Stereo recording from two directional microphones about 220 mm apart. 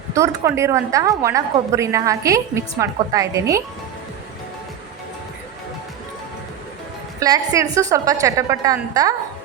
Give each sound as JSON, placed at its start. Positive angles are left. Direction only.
{"t": 0.1, "sound": "a woman's voice", "side_deg": -15}
{"t": 7.2, "sound": "a woman's voice", "side_deg": -15}